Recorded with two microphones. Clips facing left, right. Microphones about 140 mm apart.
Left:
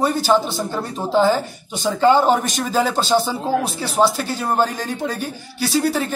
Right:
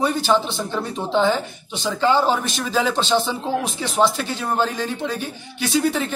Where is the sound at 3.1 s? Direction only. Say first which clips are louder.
Left 2 dB; 10° left (ahead or behind).